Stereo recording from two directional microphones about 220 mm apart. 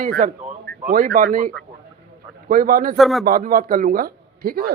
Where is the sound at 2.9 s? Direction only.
Centre (ahead or behind).